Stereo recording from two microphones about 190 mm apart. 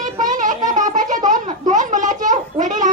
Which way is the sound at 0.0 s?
45° right (ahead or behind).